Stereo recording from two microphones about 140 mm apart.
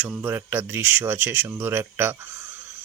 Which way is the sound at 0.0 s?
15° right (ahead or behind).